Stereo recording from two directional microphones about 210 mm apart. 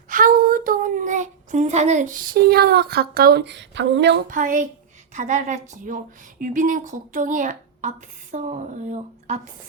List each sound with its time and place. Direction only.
0.1 s speech: 40° right (ahead or behind); by 4.2 s 55° right (ahead or behind)
4.3 s speech: 40° right (ahead or behind)